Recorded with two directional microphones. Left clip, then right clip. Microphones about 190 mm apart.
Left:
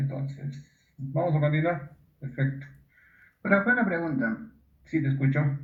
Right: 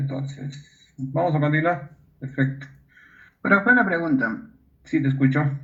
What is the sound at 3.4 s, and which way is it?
Speech, 45° right (ahead or behind).